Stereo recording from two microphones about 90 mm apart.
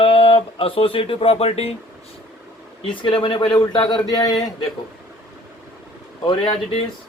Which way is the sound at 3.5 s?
50° left (ahead or behind).